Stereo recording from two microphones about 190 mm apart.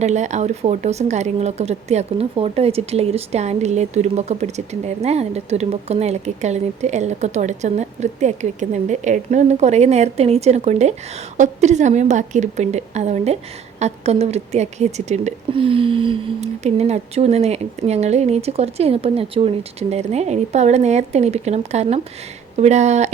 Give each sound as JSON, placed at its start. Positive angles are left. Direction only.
{"t": 0.0, "sound": "a woman's voice", "side_deg": -35}